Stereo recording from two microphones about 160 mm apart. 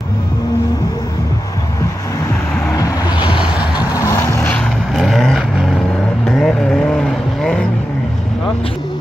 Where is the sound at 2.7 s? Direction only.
25° left (ahead or behind).